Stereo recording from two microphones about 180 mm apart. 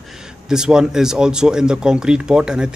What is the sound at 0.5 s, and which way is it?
Speech, 5° right (ahead or behind).